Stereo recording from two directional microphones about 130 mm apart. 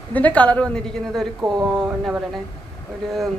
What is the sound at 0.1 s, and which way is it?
A woman's voice, 10° left (ahead or behind).